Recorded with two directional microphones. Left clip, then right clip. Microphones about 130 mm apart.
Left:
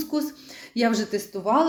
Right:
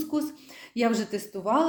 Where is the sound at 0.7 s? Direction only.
10° right (ahead or behind).